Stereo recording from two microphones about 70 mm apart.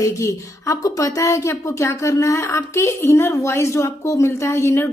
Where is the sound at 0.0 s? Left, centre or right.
Left.